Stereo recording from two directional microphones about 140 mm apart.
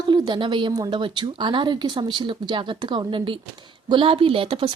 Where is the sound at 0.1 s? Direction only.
35° right (ahead or behind).